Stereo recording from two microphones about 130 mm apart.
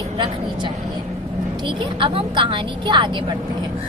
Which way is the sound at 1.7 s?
40° right (ahead or behind).